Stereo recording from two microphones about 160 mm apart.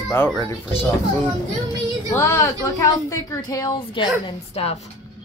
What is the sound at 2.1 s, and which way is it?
A woman's voice, 15° left (ahead or behind).